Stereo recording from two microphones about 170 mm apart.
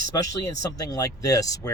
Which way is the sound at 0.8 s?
20° left (ahead or behind).